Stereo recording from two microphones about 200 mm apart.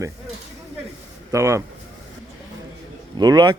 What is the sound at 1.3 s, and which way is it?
Speech, 15° right (ahead or behind).